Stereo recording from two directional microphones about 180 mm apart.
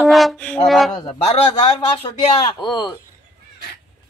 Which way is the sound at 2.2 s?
25° left (ahead or behind).